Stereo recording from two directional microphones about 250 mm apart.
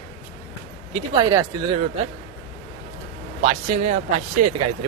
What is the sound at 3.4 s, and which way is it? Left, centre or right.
Speech, right.